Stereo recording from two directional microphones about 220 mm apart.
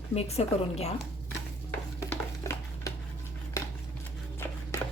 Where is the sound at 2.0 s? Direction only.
15° left (ahead or behind).